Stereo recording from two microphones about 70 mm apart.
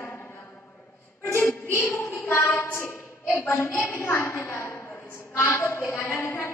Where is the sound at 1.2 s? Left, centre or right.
Left.